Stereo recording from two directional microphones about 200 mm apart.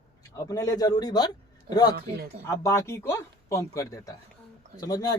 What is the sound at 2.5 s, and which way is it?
A man's voice, 15° left (ahead or behind).